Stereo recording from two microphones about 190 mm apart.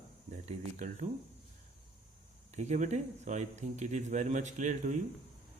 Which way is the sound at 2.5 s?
35° right (ahead or behind).